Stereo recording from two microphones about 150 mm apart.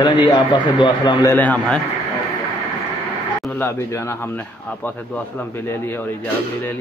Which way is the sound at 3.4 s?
10° left (ahead or behind).